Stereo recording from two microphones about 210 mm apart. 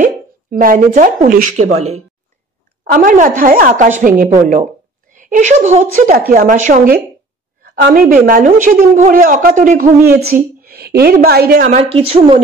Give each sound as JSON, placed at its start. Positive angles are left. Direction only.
{"t": 0.0, "sound": "a woman's voice", "side_deg": -40}
{"t": 11.9, "sound": "a woman's voice", "side_deg": -25}